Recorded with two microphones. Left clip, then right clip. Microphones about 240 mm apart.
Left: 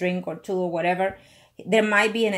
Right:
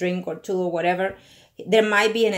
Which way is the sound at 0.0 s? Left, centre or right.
Left.